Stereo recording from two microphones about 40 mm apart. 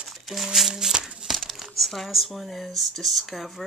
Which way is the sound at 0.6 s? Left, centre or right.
Centre.